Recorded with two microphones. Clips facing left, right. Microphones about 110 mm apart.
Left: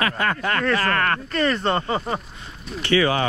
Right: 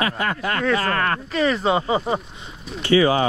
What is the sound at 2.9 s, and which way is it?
Speech, 30° right (ahead or behind).